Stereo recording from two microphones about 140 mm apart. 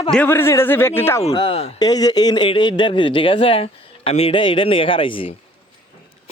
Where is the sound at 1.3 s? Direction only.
30° left (ahead or behind).